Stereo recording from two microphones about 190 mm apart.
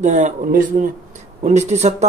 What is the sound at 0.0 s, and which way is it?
Speech, 40° right (ahead or behind).